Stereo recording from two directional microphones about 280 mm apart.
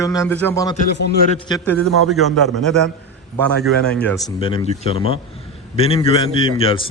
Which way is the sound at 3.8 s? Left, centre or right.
Centre.